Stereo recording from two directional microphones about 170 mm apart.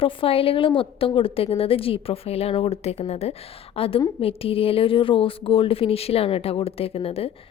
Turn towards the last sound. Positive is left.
turn(degrees=35)  # may be behind; listen again after turning